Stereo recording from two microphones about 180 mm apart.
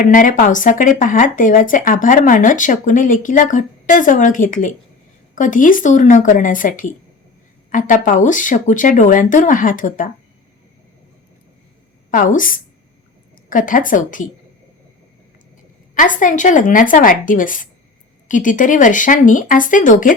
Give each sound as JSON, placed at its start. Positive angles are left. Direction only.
{"t": 0.0, "sound": "speech", "side_deg": 45}
{"t": 12.1, "sound": "speech", "side_deg": 50}
{"t": 16.0, "sound": "speech", "side_deg": 45}